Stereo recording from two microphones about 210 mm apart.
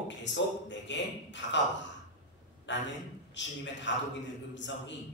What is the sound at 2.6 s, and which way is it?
A man's voice, 60° left (ahead or behind).